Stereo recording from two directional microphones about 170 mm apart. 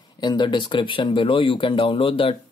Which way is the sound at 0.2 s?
25° left (ahead or behind).